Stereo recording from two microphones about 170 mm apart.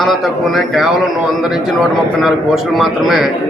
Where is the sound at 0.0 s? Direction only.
Centre (ahead or behind).